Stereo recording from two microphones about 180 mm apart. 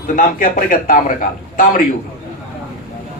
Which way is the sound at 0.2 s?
50° left (ahead or behind).